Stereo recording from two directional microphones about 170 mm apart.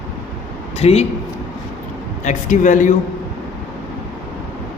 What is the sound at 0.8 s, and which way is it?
Speech, 40° left (ahead or behind).